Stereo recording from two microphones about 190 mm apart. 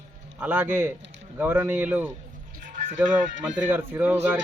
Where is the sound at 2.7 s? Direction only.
45° right (ahead or behind).